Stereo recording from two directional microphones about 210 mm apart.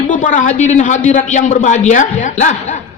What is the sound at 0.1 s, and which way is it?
A man's voice, 35° left (ahead or behind).